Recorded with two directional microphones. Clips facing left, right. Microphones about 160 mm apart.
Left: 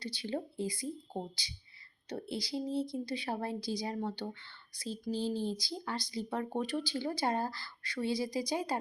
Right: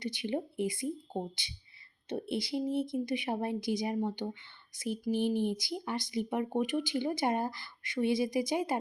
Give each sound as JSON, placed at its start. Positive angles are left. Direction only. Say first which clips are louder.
{"t": 0.0, "sound": "speech", "louder": "right 3 dB", "side_deg": -20}